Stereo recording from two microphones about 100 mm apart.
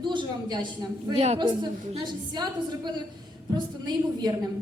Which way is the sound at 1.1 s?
90° right.